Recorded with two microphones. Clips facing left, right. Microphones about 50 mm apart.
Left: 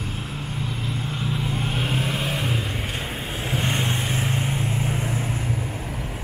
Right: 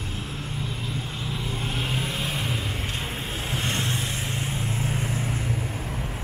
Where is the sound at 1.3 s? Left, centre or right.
Centre.